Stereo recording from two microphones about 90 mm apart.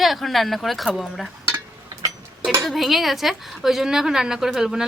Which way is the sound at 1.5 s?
35° right (ahead or behind).